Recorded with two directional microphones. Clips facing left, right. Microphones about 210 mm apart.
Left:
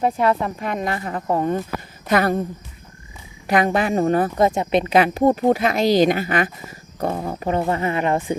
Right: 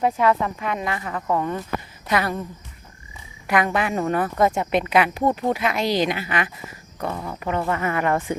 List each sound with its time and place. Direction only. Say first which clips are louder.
0.0 s speech: left 1 dB; 30° left (ahead or behind)
2.0 s a woman's voice: left 5 dB; 50° left (ahead or behind)
3.4 s a woman's voice: left 3 dB; 35° left (ahead or behind)
4.9 s speech: left 5 dB; 40° left (ahead or behind)